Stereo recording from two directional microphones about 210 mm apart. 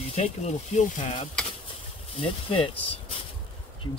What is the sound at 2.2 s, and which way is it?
Speech, 25° left (ahead or behind).